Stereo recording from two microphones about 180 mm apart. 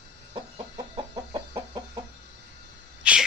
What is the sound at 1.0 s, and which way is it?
Chicken, 30° right (ahead or behind).